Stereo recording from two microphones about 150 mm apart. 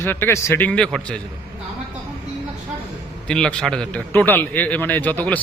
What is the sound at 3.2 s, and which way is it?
A man's voice, 5° left (ahead or behind).